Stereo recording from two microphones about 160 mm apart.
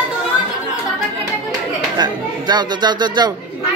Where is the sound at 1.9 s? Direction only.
25° right (ahead or behind).